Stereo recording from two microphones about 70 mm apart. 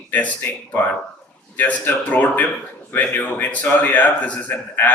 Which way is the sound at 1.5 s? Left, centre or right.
Left.